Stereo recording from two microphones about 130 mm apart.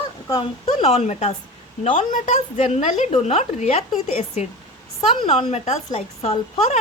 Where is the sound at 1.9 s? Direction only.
75° left (ahead or behind).